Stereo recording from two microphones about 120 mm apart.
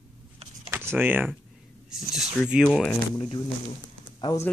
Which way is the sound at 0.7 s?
20° right (ahead or behind).